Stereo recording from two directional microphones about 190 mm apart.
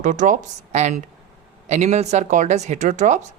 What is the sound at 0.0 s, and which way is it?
Speech, 40° right (ahead or behind).